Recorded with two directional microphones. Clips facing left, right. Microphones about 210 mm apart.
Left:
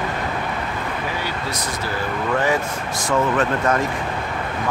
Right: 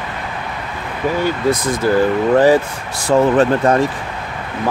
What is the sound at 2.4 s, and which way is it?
Speech, 35° right (ahead or behind).